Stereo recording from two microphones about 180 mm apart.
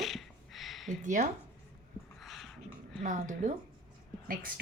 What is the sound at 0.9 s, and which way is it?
Speech, 45° right (ahead or behind).